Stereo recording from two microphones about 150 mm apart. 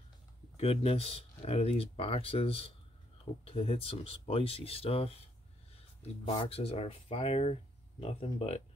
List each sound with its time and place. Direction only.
0.6 s speech: 40° left (ahead or behind)